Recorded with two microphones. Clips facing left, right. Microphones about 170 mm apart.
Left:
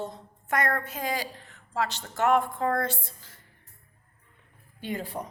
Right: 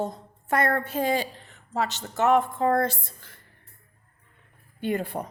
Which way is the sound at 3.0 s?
60° right (ahead or behind).